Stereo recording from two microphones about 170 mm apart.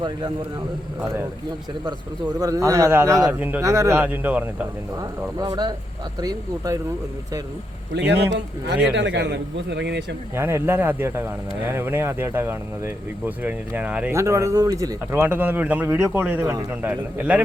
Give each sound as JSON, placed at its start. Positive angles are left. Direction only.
{"t": 2.4, "sound": "speech", "side_deg": -20}
{"t": 4.9, "sound": "speech", "side_deg": -20}
{"t": 7.9, "sound": "a man's voice", "side_deg": -90}
{"t": 10.3, "sound": "speech", "side_deg": -15}